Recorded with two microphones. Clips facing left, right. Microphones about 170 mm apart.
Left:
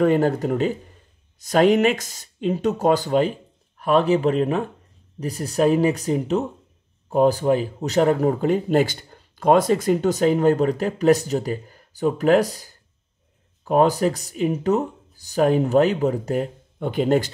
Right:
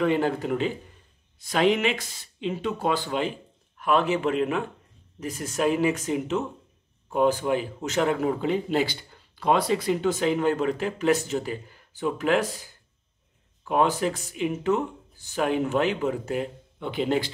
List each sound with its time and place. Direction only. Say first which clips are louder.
0.0 s a man's voice: left 5 dB; 45° left (ahead or behind)